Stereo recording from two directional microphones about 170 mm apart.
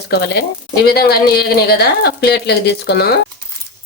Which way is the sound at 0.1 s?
75° left (ahead or behind).